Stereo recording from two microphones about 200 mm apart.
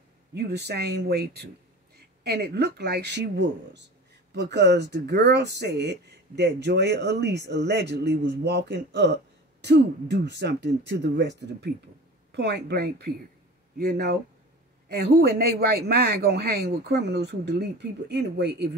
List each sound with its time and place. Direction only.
0.3 s speech: 55° right (ahead or behind)